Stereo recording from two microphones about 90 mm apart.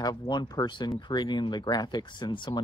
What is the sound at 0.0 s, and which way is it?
Speech, 50° left (ahead or behind).